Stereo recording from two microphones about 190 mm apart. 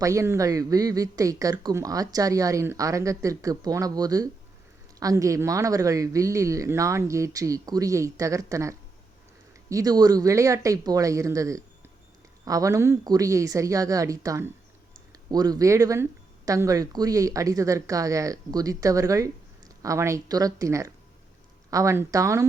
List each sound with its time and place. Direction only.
0.0 s speech: 15° right (ahead or behind)